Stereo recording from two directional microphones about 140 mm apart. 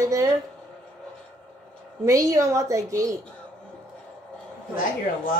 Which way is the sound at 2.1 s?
20° right (ahead or behind).